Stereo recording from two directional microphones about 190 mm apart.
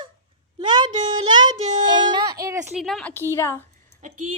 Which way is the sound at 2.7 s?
Centre (ahead or behind).